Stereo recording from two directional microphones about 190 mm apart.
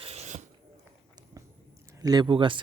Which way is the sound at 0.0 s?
35° right (ahead or behind).